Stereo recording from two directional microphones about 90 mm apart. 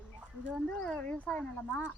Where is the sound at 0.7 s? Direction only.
10° left (ahead or behind).